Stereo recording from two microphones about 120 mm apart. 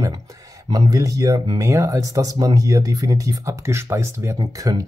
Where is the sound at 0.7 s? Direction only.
30° right (ahead or behind).